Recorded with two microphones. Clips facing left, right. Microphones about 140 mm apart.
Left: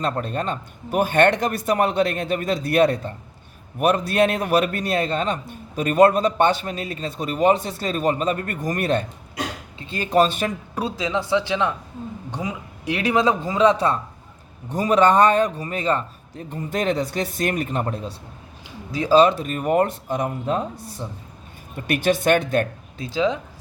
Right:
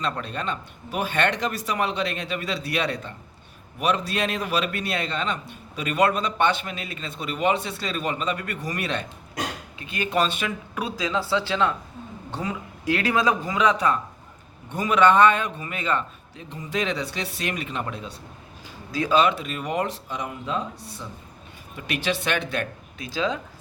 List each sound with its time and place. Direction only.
0.0 s a man's voice: 45° left (ahead or behind)
9.7 s a man's voice: 30° left (ahead or behind)
18.9 s a man's voice: 30° left (ahead or behind)
23.0 s speech: 20° left (ahead or behind)